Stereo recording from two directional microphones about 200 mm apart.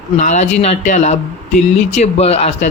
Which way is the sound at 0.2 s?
35° left (ahead or behind).